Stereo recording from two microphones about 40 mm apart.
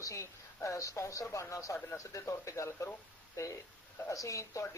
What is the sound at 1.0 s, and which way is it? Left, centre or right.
Speech, left.